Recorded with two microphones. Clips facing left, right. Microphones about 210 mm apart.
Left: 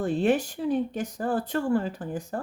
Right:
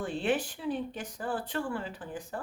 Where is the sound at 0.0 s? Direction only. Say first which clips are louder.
Left 7 dB; 45° left (ahead or behind).